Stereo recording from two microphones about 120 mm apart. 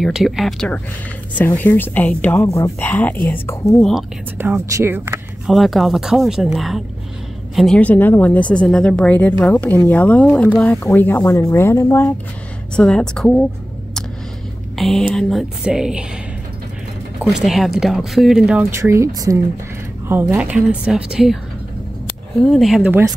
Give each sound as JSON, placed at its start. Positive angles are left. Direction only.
{"t": 0.0, "sound": "speech", "side_deg": 0}
{"t": 1.4, "sound": "speech", "side_deg": 20}
{"t": 2.4, "sound": "speech", "side_deg": 25}
{"t": 2.8, "sound": "speech", "side_deg": 15}
{"t": 3.6, "sound": "speech", "side_deg": 0}
{"t": 4.4, "sound": "speech", "side_deg": -20}
{"t": 5.5, "sound": "speech", "side_deg": 0}
{"t": 10.6, "sound": "speech", "side_deg": 20}
{"t": 12.7, "sound": "speech", "side_deg": 5}
{"t": 14.8, "sound": "speech", "side_deg": 0}
{"t": 17.2, "sound": "speech", "side_deg": -5}
{"t": 18.6, "sound": "speech", "side_deg": -25}
{"t": 20.3, "sound": "speech", "side_deg": -10}
{"t": 22.5, "sound": "speech", "side_deg": 0}